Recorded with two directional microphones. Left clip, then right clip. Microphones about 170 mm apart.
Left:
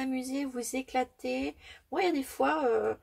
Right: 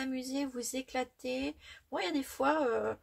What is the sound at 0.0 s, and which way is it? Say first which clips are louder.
Speech: left 3 dB; 35° left (ahead or behind).